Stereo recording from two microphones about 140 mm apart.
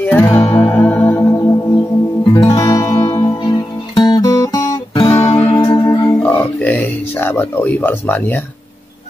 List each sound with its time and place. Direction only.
0.0 s music: 10° left (ahead or behind)
3.3 s guitar: 25° left (ahead or behind)
5.4 s music: 20° left (ahead or behind)